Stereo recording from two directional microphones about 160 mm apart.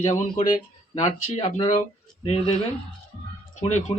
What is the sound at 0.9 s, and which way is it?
Speech, 45° left (ahead or behind).